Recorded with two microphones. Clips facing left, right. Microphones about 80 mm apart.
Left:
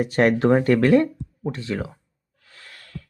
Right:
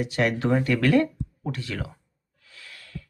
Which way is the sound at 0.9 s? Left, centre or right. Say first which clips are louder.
Left 4 dB; left.